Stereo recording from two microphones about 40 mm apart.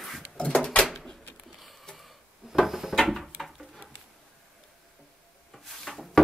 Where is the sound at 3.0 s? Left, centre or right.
Centre.